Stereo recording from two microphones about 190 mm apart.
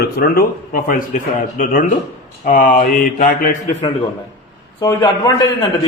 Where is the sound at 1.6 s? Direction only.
45° left (ahead or behind).